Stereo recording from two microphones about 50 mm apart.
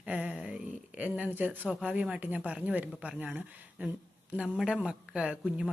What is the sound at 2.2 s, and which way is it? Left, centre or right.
Speech, right.